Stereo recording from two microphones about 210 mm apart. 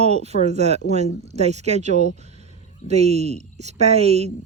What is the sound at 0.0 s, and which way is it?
A woman's voice, 30° right (ahead or behind).